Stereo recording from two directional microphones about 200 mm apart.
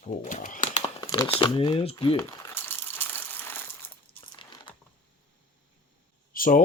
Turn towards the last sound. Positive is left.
turn(degrees=45)  # may be behind; listen again after turning